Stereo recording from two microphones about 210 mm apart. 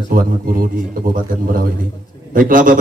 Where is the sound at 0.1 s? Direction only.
45° right (ahead or behind).